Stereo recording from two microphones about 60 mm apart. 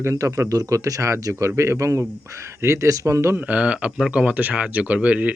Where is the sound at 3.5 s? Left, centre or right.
Centre.